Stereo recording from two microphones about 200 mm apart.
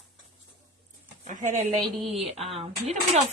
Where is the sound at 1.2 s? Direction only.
40° right (ahead or behind).